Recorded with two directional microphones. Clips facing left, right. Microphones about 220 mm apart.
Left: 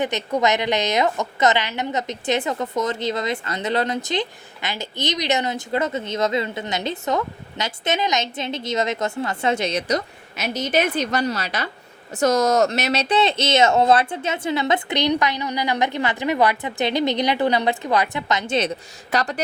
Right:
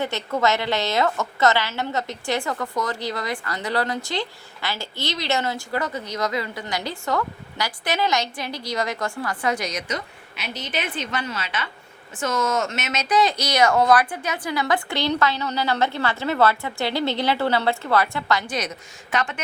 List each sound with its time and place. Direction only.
0.0 s a woman's voice: 20° left (ahead or behind); by 19.4 s 35° left (ahead or behind)